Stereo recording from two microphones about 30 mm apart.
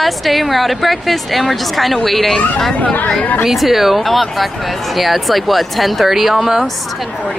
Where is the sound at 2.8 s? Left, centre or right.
Left.